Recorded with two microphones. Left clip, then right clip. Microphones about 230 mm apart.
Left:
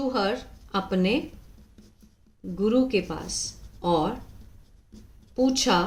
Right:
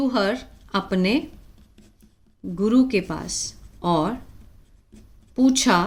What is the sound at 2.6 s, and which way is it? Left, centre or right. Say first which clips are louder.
Speech: right 3 dB; right.